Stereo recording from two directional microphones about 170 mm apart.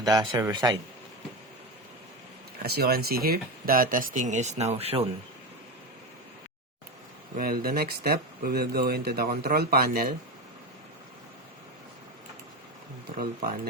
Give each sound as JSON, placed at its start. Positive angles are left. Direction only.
{"t": 0.0, "sound": "speech", "side_deg": -20}
{"t": 2.6, "sound": "speech", "side_deg": -65}
{"t": 7.3, "sound": "speech", "side_deg": -60}